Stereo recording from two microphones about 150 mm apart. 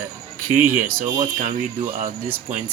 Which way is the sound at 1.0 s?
30° right (ahead or behind).